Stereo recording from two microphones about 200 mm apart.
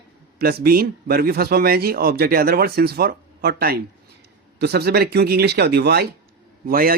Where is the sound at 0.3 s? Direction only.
50° right (ahead or behind).